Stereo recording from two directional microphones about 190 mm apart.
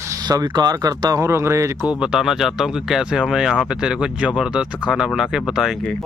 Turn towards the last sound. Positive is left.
turn(degrees=0)  # may be behind; listen again after turning